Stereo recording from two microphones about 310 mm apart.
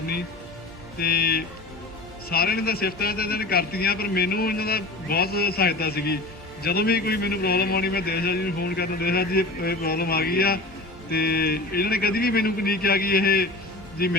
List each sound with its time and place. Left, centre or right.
0.9 s a man's voice: left